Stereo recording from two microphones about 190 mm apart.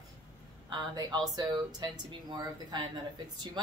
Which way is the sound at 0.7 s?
20° right (ahead or behind).